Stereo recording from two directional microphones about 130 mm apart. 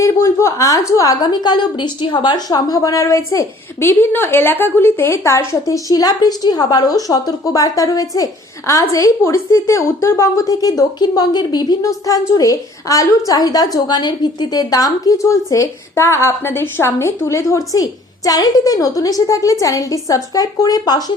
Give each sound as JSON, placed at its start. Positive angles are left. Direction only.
{"t": 0.0, "sound": "a woman's voice", "side_deg": 25}